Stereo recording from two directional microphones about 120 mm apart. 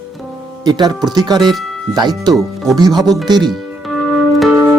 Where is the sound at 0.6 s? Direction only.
35° right (ahead or behind).